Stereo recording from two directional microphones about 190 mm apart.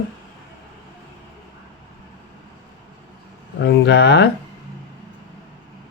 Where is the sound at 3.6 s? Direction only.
60° left (ahead or behind).